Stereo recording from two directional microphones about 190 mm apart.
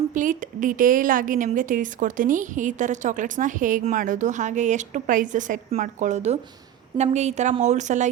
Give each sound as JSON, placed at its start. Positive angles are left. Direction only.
{"t": 0.1, "sound": "a woman's voice", "side_deg": -45}